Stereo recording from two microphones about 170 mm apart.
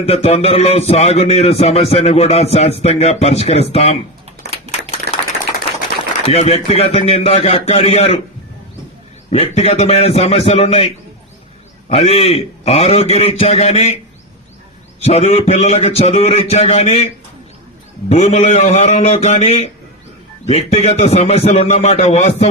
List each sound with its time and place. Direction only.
0.0 s a man's voice: 35° left (ahead or behind)
5.1 s a sound: 75° right (ahead or behind)
6.2 s a man's voice: 35° left (ahead or behind)
9.3 s a man's voice: 35° left (ahead or behind)
15.0 s a man's voice: 40° left (ahead or behind)
18.1 s a man's voice: 40° left (ahead or behind)